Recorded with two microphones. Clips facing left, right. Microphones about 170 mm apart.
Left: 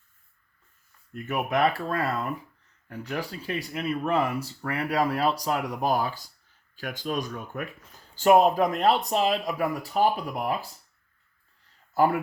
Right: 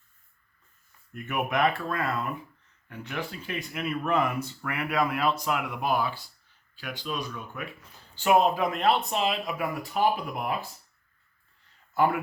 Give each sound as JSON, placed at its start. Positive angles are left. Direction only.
{"t": 1.1, "sound": "speech", "side_deg": 35}
{"t": 11.9, "sound": "speech", "side_deg": 40}